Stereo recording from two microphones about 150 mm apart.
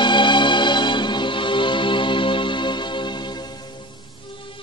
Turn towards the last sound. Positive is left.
turn(degrees=35)  # may be behind; listen again after turning